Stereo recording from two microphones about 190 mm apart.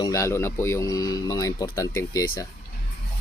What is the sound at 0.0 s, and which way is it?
Speech, 15° left (ahead or behind).